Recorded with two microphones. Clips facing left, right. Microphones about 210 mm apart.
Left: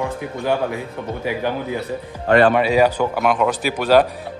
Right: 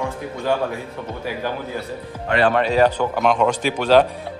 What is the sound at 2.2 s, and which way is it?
Speech, 50° left (ahead or behind).